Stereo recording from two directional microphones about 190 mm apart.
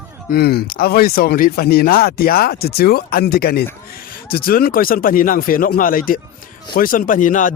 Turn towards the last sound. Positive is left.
turn(degrees=45)  # may be behind; listen again after turning